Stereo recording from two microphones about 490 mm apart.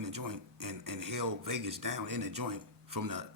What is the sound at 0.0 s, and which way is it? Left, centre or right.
A man's voice, right.